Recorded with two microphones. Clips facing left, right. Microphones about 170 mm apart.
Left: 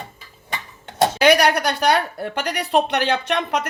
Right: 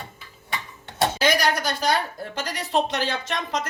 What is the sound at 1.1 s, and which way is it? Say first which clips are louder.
Speech: left 8 dB; 65° left (ahead or behind).